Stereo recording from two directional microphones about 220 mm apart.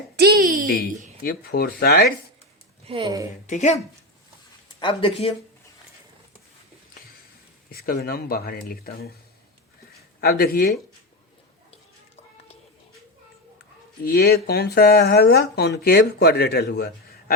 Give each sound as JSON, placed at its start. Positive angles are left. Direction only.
{"t": 0.2, "sound": "a sound", "side_deg": -45}
{"t": 1.2, "sound": "speech", "side_deg": 45}
{"t": 2.8, "sound": "speech", "side_deg": -25}
{"t": 3.4, "sound": "speech", "side_deg": 35}
{"t": 4.8, "sound": "speech", "side_deg": 25}
{"t": 7.7, "sound": "speech", "side_deg": 45}
{"t": 10.2, "sound": "speech", "side_deg": 45}
{"t": 14.0, "sound": "speech", "side_deg": 45}